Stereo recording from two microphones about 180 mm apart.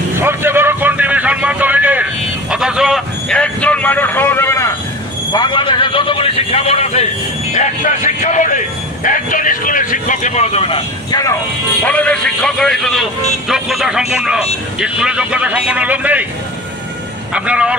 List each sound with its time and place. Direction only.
0.2 s vehicle: 10° right (ahead or behind)
2.5 s a sound: 5° right (ahead or behind); by 4.7 s 15° left (ahead or behind)
5.3 s a man's voice: 25° left (ahead or behind)
11.8 s a man's voice: 5° left (ahead or behind); by 16.3 s 10° right (ahead or behind)
17.3 s a man's voice: 5° right (ahead or behind)